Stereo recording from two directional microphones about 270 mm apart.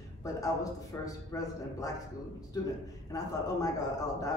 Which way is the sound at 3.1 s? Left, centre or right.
Centre.